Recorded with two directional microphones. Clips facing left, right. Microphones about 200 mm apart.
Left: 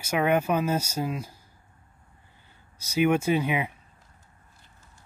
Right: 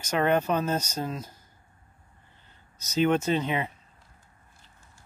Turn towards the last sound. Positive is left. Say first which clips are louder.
# left 2 dB
turn(degrees=10)  # may be behind; listen again after turning